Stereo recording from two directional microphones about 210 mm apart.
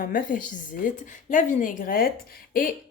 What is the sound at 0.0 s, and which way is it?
A woman's voice, 40° left (ahead or behind).